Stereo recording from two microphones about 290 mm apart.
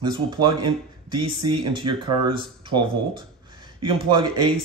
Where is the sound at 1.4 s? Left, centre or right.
Right.